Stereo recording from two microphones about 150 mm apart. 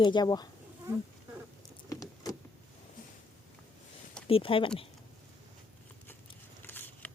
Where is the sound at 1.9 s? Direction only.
25° left (ahead or behind).